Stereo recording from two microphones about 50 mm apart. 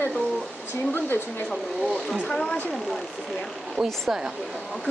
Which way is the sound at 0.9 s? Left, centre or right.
Left.